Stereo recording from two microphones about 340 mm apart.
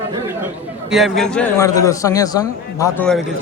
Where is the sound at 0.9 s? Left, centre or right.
Centre.